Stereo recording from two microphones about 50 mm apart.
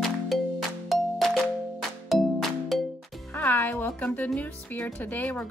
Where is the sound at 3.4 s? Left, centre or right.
Left.